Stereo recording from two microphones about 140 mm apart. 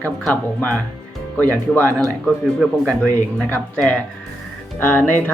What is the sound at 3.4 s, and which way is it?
Speech, 10° left (ahead or behind).